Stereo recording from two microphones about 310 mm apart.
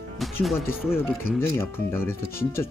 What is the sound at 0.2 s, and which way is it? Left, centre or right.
Speech, centre.